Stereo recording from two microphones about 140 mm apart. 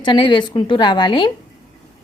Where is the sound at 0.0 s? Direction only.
35° left (ahead or behind).